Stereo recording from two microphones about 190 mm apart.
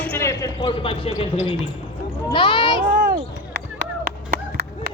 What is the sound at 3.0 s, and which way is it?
Chop, 60° right (ahead or behind).